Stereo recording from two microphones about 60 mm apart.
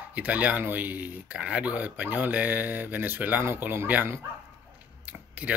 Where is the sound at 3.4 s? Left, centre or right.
Right.